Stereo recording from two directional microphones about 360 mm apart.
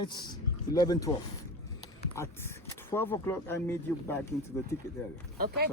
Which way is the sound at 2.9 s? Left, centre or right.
Centre.